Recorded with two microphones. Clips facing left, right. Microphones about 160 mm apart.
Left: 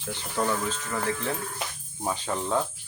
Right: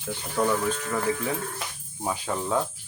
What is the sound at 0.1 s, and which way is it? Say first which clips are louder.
Speech: right 3 dB; 10° right (ahead or behind).